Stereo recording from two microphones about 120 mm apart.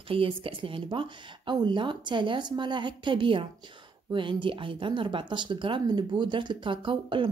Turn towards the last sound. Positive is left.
turn(degrees=-45)  # may be behind; listen again after turning